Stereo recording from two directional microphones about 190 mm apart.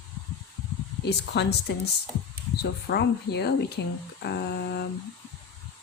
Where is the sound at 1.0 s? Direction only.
60° left (ahead or behind).